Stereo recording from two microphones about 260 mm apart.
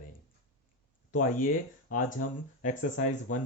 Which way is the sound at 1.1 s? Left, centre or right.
Left.